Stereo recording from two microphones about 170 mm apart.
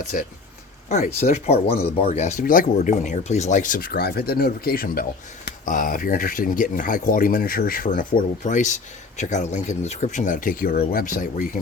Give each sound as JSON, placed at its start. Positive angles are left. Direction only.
{"t": 0.1, "sound": "speech", "side_deg": 55}
{"t": 0.9, "sound": "speech", "side_deg": 45}